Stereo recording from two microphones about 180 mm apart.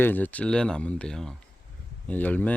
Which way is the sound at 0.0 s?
10° left (ahead or behind).